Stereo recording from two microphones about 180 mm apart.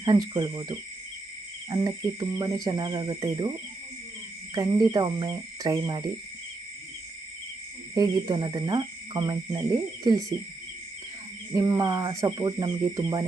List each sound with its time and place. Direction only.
0.0 s speech: 25° right (ahead or behind)
4.5 s speech: 20° right (ahead or behind)
7.9 s speech: 25° right (ahead or behind)
11.5 s speech: 20° right (ahead or behind)